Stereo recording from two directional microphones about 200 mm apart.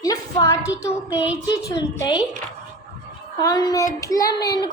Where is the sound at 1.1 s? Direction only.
5° right (ahead or behind).